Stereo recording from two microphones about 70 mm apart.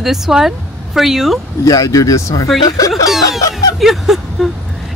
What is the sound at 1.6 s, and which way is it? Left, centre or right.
Speech, left.